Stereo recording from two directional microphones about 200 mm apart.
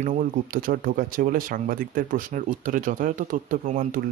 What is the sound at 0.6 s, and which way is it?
Speech, 45° right (ahead or behind).